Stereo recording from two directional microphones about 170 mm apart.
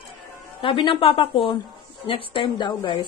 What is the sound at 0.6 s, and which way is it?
A woman's voice, 30° left (ahead or behind).